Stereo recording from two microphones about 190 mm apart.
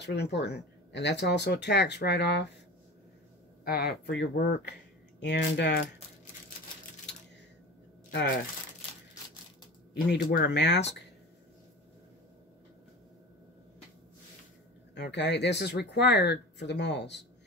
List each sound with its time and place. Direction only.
0.0 s speech: 60° left (ahead or behind)
3.6 s speech: 55° left (ahead or behind)
8.1 s speech: 65° left (ahead or behind)
10.0 s speech: 60° left (ahead or behind)
15.0 s speech: 65° left (ahead or behind)